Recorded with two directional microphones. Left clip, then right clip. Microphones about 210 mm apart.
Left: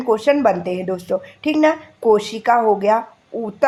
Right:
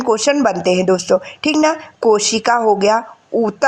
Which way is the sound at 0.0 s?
25° right (ahead or behind).